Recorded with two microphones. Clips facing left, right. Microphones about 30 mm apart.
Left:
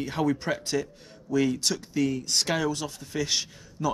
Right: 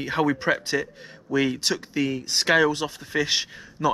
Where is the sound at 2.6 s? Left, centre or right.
Right.